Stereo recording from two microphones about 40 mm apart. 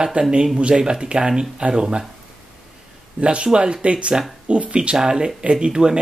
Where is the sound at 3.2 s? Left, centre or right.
Right.